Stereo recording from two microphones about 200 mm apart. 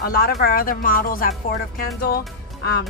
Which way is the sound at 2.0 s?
50° left (ahead or behind).